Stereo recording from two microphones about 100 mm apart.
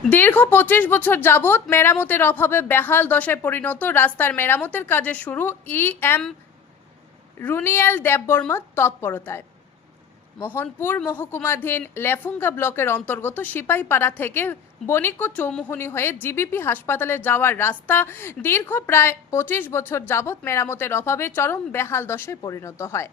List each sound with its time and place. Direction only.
0.1 s a woman's voice: 15° left (ahead or behind)
7.3 s a woman's voice: 20° left (ahead or behind)
22.4 s a woman's voice: 35° left (ahead or behind)